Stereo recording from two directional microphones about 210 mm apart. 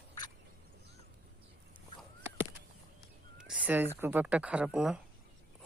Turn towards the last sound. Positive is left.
turn(degrees=-5)  # may be behind; listen again after turning